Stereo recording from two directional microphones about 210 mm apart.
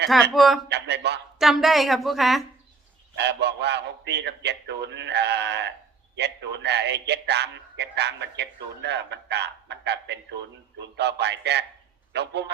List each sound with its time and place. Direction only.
0.1 s a woman's voice: centre (ahead or behind)
0.7 s speech: 55° right (ahead or behind)
1.4 s a woman's voice: centre (ahead or behind)
3.2 s a man's voice: 55° right (ahead or behind)